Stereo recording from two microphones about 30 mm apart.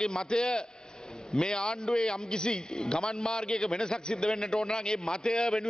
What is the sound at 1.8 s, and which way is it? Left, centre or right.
Speech, centre.